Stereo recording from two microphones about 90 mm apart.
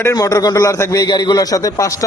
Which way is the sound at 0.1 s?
40° left (ahead or behind).